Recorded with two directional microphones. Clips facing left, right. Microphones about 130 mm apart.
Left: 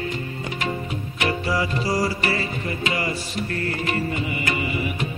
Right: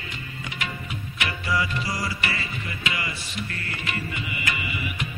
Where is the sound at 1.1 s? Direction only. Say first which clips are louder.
Left 4 dB; 35° left (ahead or behind).